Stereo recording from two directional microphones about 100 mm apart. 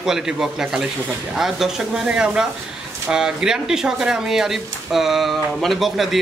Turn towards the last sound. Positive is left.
turn(degrees=0)  # may be behind; listen again after turning